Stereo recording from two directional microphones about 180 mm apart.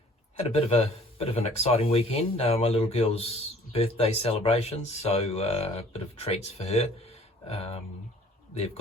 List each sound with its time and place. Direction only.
0.3 s speech: 35° left (ahead or behind)